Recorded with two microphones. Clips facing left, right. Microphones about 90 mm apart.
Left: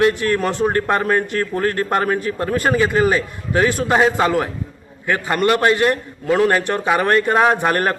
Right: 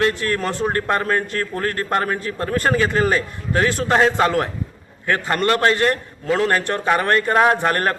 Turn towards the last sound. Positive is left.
turn(degrees=15)  # may be behind; listen again after turning